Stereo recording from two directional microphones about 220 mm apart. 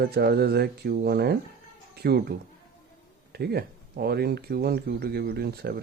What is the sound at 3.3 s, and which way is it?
Speech, 45° right (ahead or behind).